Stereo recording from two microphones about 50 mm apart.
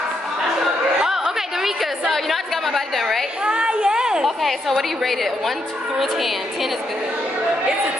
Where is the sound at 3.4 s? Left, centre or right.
Centre.